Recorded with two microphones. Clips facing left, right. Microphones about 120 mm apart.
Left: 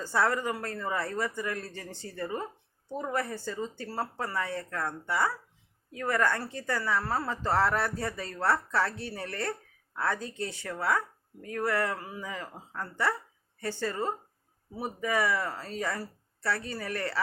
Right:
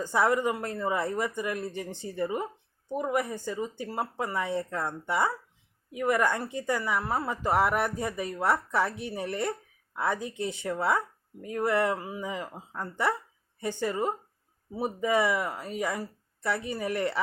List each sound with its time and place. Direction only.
0.0 s a woman's voice: 15° right (ahead or behind)